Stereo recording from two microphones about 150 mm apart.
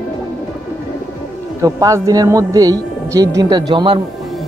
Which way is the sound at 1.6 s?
25° right (ahead or behind).